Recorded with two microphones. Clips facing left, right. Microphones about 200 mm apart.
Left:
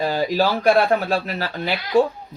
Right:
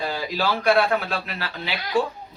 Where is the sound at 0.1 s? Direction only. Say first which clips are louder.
Left 6 dB; 45° left (ahead or behind).